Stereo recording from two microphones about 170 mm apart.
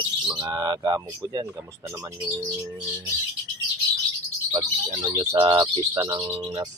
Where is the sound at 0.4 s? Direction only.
20° right (ahead or behind).